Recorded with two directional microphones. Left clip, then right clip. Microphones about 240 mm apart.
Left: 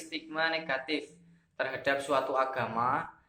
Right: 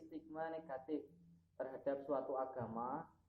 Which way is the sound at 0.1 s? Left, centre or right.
Left.